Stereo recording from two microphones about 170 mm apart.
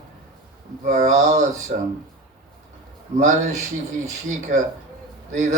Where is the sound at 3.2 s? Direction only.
45° right (ahead or behind).